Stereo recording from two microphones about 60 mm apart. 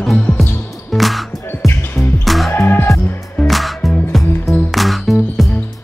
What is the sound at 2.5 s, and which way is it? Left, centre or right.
Music, left.